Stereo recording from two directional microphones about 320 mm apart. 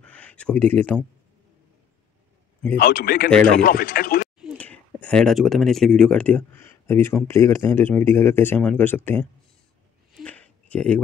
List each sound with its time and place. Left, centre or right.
0.0 s speech: centre
2.8 s speech: left
3.3 s speech: centre
3.6 s speech: left
4.4 s speech: centre
10.1 s a sound: centre